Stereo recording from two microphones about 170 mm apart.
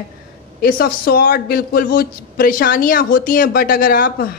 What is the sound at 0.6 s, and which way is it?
A man's voice, 60° left (ahead or behind).